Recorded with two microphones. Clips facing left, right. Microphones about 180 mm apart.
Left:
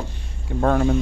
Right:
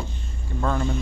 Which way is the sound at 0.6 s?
55° left (ahead or behind).